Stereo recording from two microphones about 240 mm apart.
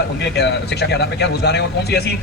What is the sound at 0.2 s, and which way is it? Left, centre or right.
Speech, left.